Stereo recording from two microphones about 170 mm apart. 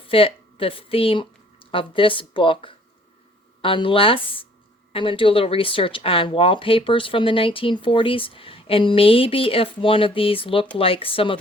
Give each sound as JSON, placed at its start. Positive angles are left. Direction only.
{"t": 0.1, "sound": "speech", "side_deg": 35}